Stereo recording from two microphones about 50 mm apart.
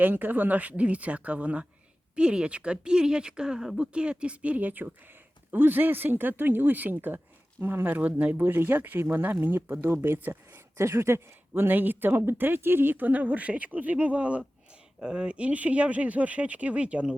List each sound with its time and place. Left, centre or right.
0.0 s speech: right
10.8 s speech: right